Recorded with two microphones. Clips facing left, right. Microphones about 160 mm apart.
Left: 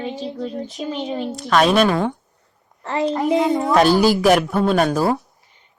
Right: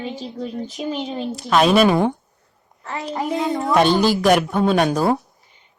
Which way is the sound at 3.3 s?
Centre (ahead or behind).